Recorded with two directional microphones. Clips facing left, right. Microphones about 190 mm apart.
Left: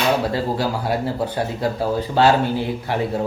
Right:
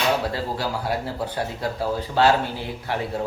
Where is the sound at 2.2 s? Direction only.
20° left (ahead or behind).